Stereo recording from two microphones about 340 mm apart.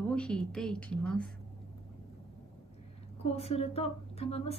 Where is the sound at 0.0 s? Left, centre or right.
Centre.